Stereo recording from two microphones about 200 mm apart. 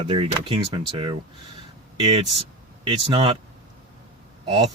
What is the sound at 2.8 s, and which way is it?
Speech, 25° right (ahead or behind).